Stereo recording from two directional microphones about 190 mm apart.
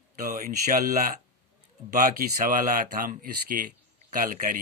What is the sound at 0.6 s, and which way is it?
Speech, 40° right (ahead or behind).